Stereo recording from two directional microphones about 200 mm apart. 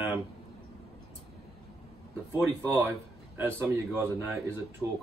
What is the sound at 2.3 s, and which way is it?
Speech, 10° right (ahead or behind).